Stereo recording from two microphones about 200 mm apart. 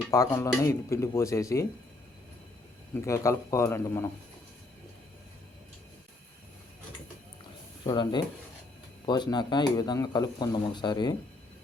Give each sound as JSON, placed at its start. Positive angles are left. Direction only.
{"t": 0.1, "sound": "speech", "side_deg": 15}
{"t": 2.9, "sound": "speech", "side_deg": 15}
{"t": 7.9, "sound": "speech", "side_deg": 20}